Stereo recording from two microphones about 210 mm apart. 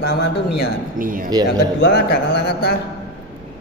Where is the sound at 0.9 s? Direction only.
40° right (ahead or behind).